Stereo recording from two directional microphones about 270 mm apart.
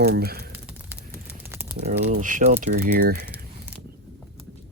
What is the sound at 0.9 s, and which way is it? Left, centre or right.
Typing, centre.